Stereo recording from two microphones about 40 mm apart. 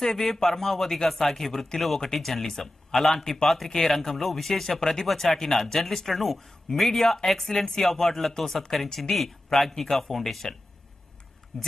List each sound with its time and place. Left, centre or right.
0.0 s speech: centre
8.8 s speech: centre
9.1 s speech: centre
11.5 s speech: centre